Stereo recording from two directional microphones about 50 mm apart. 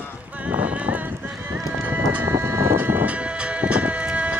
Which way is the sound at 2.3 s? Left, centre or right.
Right.